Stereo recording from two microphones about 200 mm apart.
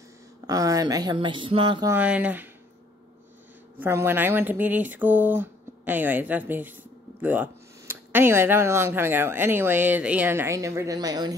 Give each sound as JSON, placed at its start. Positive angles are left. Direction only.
{"t": 0.5, "sound": "speech", "side_deg": -15}
{"t": 1.9, "sound": "speech", "side_deg": -5}
{"t": 3.8, "sound": "speech", "side_deg": -10}